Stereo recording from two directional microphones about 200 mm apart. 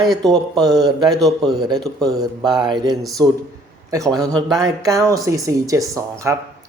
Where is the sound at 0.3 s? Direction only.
20° right (ahead or behind).